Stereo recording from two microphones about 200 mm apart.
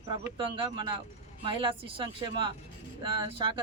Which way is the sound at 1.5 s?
25° right (ahead or behind).